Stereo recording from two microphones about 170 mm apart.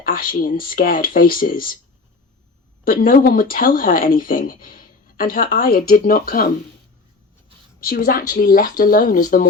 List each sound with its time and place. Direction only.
0.1 s speech: 55° left (ahead or behind)
2.8 s speech: 55° left (ahead or behind)
7.8 s a woman's voice: 60° left (ahead or behind)